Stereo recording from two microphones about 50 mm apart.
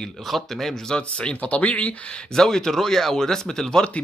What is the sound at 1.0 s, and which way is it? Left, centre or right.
Speech, left.